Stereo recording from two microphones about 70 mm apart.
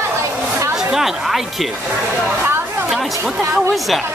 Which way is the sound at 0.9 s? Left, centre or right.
Centre.